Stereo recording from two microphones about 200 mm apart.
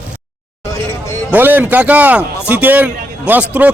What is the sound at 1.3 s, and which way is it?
A man's voice, 10° right (ahead or behind).